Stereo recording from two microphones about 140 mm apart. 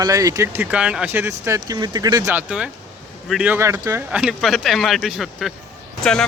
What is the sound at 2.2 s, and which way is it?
Speech, 10° right (ahead or behind).